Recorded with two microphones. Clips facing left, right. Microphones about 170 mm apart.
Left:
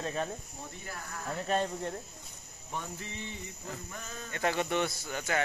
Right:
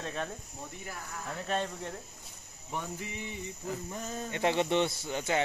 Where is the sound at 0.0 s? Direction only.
5° left (ahead or behind).